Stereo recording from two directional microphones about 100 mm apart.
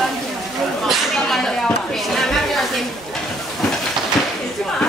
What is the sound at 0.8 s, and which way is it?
Speech, 5° left (ahead or behind).